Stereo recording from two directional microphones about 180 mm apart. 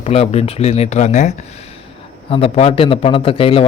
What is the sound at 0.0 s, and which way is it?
Speech, 35° left (ahead or behind).